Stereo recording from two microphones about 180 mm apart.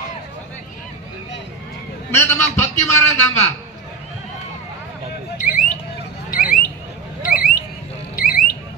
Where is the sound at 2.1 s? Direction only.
15° left (ahead or behind).